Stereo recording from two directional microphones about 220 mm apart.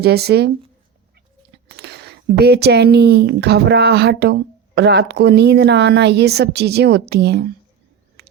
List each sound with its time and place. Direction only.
0.0 s speech: 45° right (ahead or behind)
1.6 s speech: 50° right (ahead or behind)
8.2 s a sound: 50° right (ahead or behind)